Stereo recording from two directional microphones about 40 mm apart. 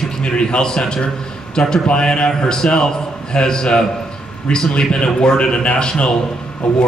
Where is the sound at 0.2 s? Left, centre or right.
Left.